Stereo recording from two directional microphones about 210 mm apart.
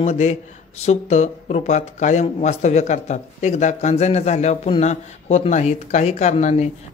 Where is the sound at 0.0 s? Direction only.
30° left (ahead or behind).